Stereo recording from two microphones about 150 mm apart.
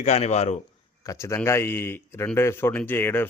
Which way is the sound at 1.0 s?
20° left (ahead or behind).